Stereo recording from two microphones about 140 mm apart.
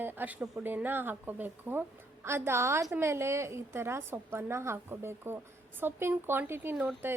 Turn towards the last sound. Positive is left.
turn(degrees=-15)  # may be behind; listen again after turning